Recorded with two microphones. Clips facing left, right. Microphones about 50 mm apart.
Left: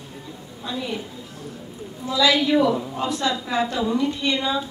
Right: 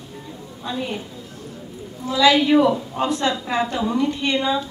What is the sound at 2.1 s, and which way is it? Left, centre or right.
A woman's voice, right.